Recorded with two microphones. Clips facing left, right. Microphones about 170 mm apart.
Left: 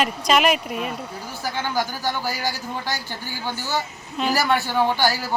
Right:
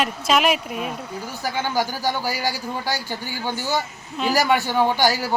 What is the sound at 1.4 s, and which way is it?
Speech, 10° right (ahead or behind).